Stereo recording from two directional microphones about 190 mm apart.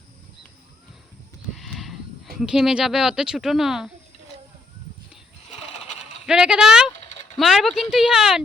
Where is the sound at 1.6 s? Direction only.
Centre (ahead or behind).